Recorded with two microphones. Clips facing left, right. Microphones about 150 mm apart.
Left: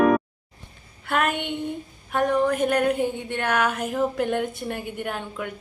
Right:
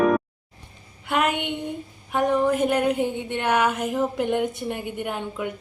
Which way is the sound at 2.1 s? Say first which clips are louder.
Right 1 dB; 20° right (ahead or behind).